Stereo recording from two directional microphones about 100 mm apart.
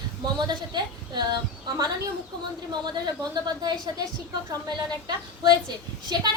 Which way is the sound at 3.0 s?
45° right (ahead or behind).